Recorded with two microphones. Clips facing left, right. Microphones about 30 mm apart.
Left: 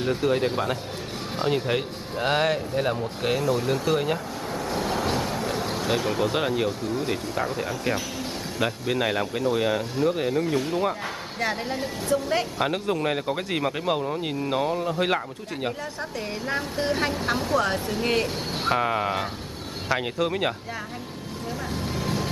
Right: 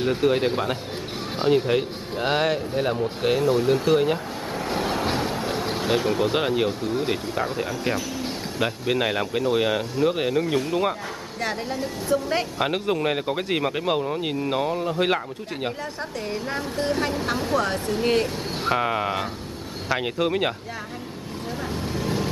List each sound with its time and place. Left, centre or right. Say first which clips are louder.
0.0 s speech: right 2 dB; centre
1.5 s speech: right 6 dB; centre
4.6 s vehicle: right 2 dB; right
4.9 s a sound: right 1 dB; right
5.9 s speech: right 3 dB; centre
12.1 s speech: right 1 dB; centre
16.3 s speech: even; centre
21.8 s vehicle: right 1 dB; centre